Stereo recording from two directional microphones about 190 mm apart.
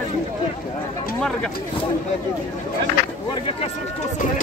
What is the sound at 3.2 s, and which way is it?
Speech, 30° left (ahead or behind).